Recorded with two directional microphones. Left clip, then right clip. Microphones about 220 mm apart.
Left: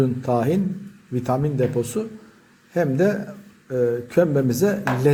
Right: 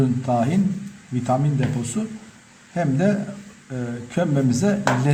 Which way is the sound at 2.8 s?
30° left (ahead or behind).